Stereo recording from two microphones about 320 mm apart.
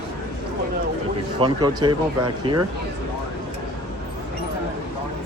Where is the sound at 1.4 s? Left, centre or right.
Centre.